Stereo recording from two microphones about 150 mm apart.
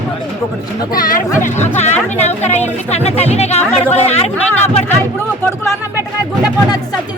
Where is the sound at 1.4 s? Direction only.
50° left (ahead or behind).